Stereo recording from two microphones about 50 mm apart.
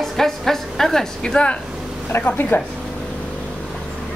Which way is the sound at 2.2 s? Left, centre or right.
Left.